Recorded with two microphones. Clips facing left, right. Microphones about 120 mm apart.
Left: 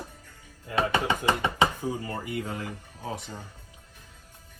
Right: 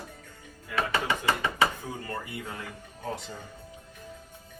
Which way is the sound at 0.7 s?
25° left (ahead or behind).